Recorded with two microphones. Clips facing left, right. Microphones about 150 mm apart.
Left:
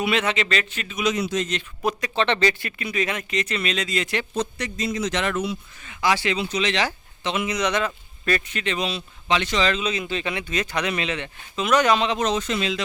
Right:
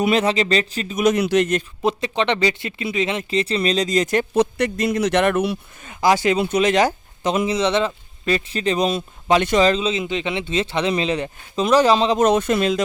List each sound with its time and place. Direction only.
0.0 s speech: 40° right (ahead or behind)
1.0 s a man's voice: 65° right (ahead or behind)
1.8 s speech: 25° right (ahead or behind); by 4.3 s 45° right (ahead or behind)
4.4 s a man's voice: 60° right (ahead or behind)
5.8 s speech: 40° right (ahead or behind); by 8.4 s 20° right (ahead or behind)
8.4 s speech: 35° right (ahead or behind)
9.7 s speech: 25° right (ahead or behind)
12.2 s speech: 55° right (ahead or behind)